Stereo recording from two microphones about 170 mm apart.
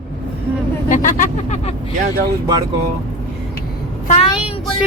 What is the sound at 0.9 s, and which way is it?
Speech, 50° left (ahead or behind).